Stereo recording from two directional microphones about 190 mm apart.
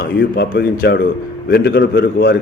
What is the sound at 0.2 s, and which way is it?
A man's voice, 55° left (ahead or behind).